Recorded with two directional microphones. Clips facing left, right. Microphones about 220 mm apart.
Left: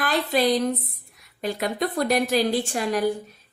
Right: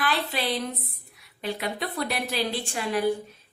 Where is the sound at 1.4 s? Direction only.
45° left (ahead or behind).